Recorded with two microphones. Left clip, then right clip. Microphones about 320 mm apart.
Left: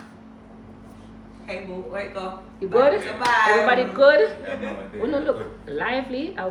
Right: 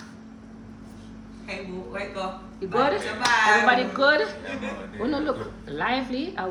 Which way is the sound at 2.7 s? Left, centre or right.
Centre.